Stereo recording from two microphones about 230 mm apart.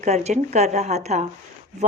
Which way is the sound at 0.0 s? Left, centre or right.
Right.